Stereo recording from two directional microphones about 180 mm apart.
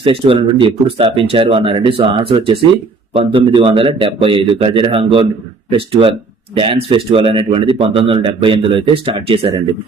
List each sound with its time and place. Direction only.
0.0 s a man's voice: 30° right (ahead or behind)